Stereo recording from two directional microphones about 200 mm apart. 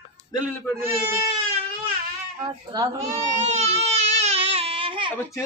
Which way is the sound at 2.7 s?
20° right (ahead or behind).